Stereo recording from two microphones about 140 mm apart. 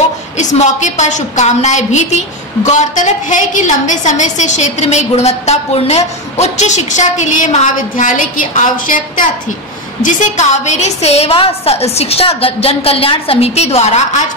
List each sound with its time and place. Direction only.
0.4 s a woman's voice: 55° left (ahead or behind); by 9.3 s 75° left (ahead or behind)
10.3 s a woman's voice: 55° left (ahead or behind)